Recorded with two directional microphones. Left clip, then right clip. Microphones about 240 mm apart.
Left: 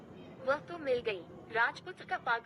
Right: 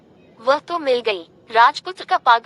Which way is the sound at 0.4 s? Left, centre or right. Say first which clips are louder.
Right 15 dB; right.